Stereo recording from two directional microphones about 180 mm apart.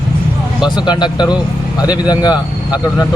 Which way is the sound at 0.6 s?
25° left (ahead or behind).